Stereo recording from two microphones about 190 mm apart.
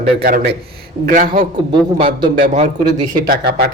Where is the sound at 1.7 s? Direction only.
25° right (ahead or behind).